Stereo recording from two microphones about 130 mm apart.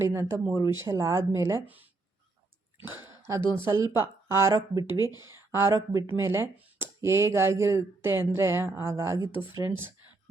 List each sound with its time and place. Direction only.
0.0 s speech: 20° right (ahead or behind)
3.1 s a sound: 20° right (ahead or behind)
3.5 s speech: 20° right (ahead or behind)